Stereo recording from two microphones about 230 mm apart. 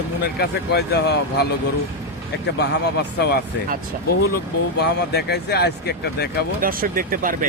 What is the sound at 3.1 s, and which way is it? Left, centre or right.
Speech, left.